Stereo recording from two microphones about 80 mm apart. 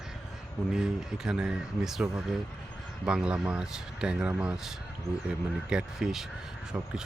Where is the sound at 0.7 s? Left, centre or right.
Centre.